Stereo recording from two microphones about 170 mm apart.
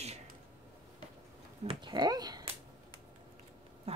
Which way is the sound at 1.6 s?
25° right (ahead or behind).